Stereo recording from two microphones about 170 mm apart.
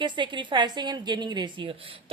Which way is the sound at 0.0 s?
25° right (ahead or behind).